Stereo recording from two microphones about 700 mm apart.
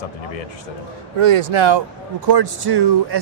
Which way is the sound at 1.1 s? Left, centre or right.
Right.